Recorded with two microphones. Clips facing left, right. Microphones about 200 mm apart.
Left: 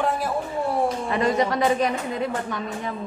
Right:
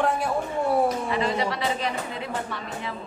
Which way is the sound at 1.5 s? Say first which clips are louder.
Left 6 dB; 50° left (ahead or behind).